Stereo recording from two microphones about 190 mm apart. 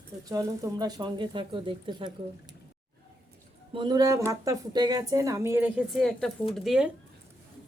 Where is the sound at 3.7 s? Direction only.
20° right (ahead or behind).